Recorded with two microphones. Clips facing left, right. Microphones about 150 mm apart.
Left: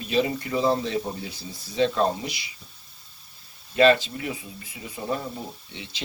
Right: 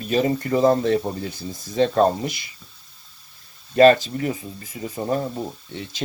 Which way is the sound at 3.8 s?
45° right (ahead or behind).